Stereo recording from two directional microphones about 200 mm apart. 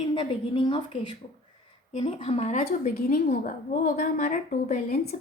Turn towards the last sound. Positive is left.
turn(degrees=35)  # may be behind; listen again after turning